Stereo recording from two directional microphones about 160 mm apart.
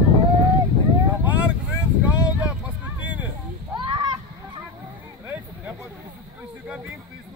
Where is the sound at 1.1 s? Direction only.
10° right (ahead or behind).